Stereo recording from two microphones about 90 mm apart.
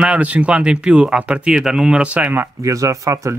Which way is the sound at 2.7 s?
35° right (ahead or behind).